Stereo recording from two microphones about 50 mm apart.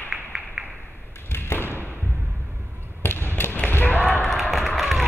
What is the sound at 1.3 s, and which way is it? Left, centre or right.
Thump, left.